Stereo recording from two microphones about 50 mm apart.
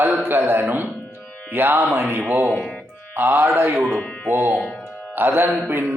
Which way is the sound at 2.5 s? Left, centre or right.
Centre.